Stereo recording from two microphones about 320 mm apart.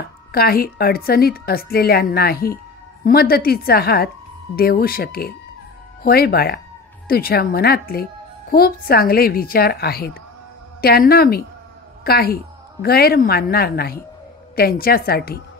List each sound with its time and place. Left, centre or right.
0.3 s a woman's voice: left